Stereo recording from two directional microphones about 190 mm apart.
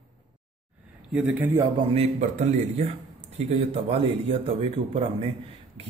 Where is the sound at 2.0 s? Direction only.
35° right (ahead or behind).